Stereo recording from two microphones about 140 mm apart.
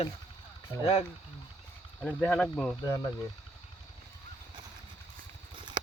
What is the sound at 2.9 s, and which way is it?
Speech, 25° left (ahead or behind).